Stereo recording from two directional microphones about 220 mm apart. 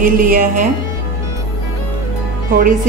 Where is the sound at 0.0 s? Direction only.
40° right (ahead or behind).